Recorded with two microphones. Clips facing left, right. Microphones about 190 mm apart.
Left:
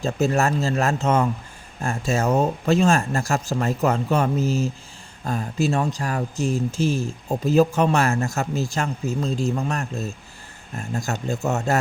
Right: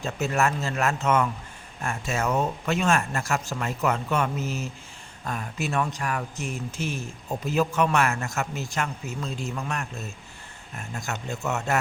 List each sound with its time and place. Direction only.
0.0 s speech: 35° left (ahead or behind)